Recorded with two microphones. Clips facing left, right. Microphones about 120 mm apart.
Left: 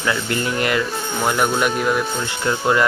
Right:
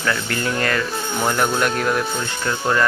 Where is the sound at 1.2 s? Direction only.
5° left (ahead or behind).